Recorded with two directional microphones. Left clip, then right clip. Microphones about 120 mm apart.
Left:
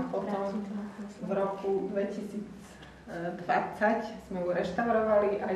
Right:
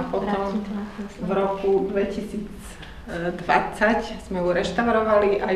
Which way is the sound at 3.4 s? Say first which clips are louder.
Right 7 dB; 30° left (ahead or behind).